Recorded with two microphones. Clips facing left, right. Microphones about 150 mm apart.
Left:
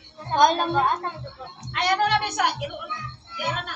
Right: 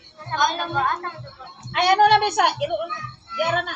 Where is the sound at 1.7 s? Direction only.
70° right (ahead or behind).